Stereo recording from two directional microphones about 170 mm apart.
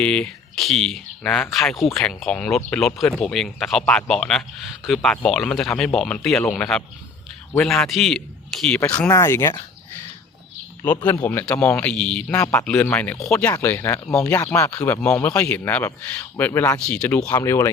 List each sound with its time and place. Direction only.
0.0 s speech: 5° left (ahead or behind)
8.8 s speech: 15° left (ahead or behind)
11.0 s speech: 10° left (ahead or behind)
17.2 s speech: 20° left (ahead or behind)